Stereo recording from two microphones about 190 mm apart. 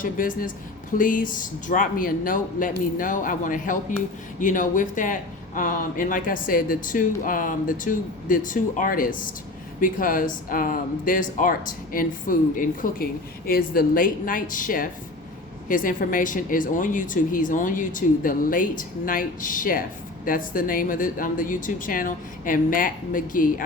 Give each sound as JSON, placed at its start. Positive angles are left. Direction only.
{"t": 0.0, "sound": "speech", "side_deg": 45}